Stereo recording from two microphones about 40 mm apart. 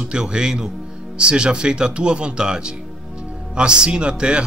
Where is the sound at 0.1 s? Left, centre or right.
Right.